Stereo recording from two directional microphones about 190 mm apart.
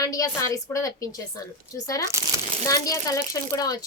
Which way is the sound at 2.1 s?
15° right (ahead or behind).